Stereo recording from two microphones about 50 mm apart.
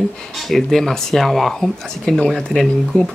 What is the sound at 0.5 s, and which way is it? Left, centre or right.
Speech, centre.